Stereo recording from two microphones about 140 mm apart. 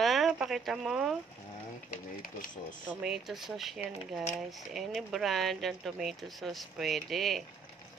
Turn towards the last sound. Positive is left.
turn(degrees=0)  # may be behind; listen again after turning